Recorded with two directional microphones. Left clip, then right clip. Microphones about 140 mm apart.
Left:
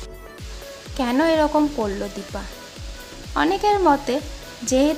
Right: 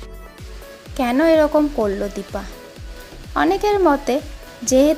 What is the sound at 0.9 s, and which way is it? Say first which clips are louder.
Speech: right 4 dB; 15° right (ahead or behind).